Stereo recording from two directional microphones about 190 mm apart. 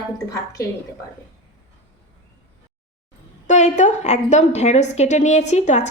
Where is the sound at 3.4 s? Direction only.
40° left (ahead or behind).